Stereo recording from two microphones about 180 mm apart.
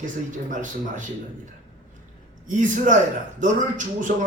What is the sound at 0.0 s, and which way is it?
Speech, 45° right (ahead or behind).